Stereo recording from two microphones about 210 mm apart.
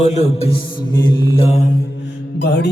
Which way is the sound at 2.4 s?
55° left (ahead or behind).